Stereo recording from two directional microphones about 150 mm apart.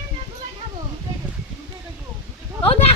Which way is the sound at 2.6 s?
40° left (ahead or behind).